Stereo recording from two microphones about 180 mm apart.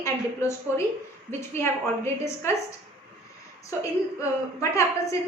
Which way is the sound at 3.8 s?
15° left (ahead or behind).